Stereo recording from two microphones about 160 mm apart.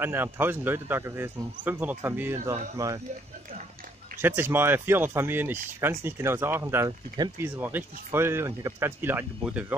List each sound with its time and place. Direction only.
0.0 s speech: 15° right (ahead or behind)
4.2 s speech: 15° right (ahead or behind)